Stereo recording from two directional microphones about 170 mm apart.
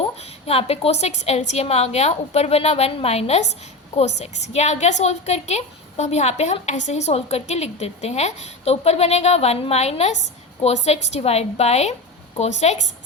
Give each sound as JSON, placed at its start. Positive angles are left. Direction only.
{"t": 0.0, "sound": "a woman's voice", "side_deg": 35}